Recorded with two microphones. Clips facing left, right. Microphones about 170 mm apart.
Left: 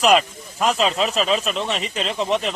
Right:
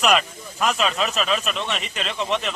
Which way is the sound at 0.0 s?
30° left (ahead or behind).